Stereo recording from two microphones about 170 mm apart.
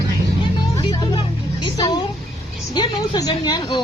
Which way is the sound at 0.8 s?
25° left (ahead or behind).